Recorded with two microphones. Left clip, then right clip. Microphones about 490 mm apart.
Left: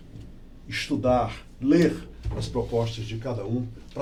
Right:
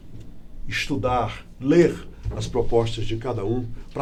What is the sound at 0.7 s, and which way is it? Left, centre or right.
Speech, right.